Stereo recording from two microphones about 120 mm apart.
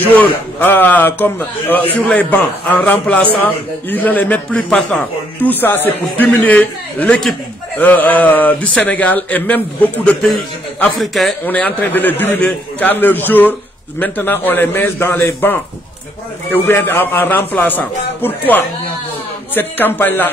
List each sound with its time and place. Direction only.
0.0 s a man's voice: 15° left (ahead or behind)
11.0 s a man's voice: centre (ahead or behind)
11.4 s a man's voice: 15° left (ahead or behind)